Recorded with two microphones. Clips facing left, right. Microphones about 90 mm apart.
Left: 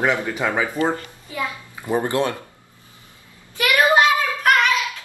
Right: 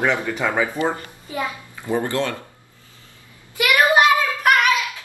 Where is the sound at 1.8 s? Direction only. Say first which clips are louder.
Left 1 dB; 15° left (ahead or behind).